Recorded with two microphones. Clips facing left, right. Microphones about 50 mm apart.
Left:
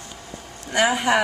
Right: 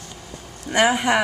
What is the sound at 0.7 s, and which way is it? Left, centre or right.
Speech, centre.